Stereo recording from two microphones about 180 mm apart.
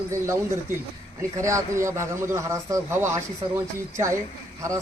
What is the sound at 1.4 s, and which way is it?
A man's voice, 15° right (ahead or behind).